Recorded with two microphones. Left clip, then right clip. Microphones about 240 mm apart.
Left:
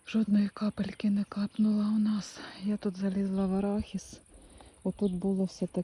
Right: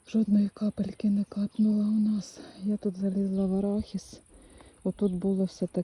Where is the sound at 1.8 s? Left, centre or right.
Centre.